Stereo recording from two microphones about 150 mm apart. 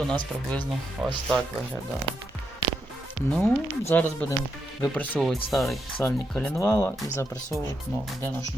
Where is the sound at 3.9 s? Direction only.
15° left (ahead or behind).